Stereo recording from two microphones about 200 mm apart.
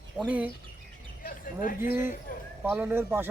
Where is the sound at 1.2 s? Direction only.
45° left (ahead or behind).